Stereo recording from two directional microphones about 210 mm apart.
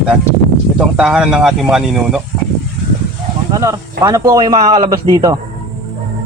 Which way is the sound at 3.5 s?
15° right (ahead or behind).